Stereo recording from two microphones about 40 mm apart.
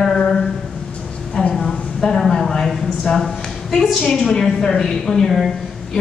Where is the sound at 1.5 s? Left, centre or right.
Centre.